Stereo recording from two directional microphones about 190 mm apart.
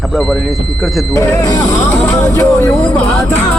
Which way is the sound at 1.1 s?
15° left (ahead or behind).